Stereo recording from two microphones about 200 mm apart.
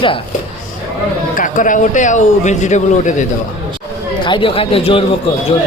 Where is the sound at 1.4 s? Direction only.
40° left (ahead or behind).